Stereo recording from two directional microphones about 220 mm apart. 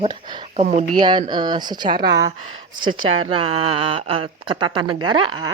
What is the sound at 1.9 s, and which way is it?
Speech, 45° right (ahead or behind).